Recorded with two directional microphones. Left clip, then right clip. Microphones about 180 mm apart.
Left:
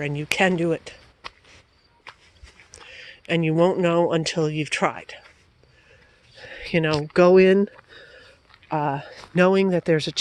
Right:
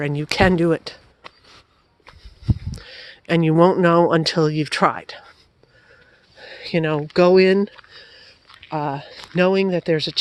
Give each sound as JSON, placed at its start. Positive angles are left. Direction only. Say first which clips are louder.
{"t": 0.0, "sound": "speech", "louder": "right 3 dB", "side_deg": -35}
{"t": 1.2, "sound": "a sound", "louder": "left 3 dB", "side_deg": 10}
{"t": 2.4, "sound": "speech", "louder": "right 15 dB", "side_deg": -35}
{"t": 6.4, "sound": "speech", "louder": "right 1 dB", "side_deg": -5}